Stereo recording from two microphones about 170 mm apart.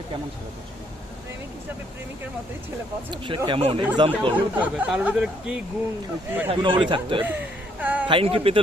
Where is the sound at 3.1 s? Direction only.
30° right (ahead or behind).